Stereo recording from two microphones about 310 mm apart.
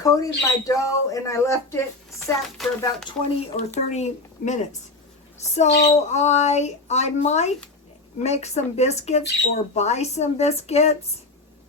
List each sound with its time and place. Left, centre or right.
0.0 s speech: centre
2.2 s chopping: centre
3.8 s speech: left
9.2 s speech: left
9.7 s speech: left